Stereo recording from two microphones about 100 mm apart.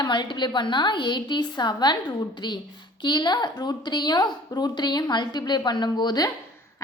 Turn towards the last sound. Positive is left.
turn(degrees=45)  # may be behind; listen again after turning